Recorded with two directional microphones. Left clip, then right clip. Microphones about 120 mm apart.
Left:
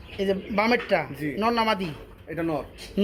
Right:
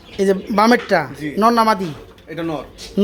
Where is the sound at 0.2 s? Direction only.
55° right (ahead or behind); by 1.9 s 40° right (ahead or behind).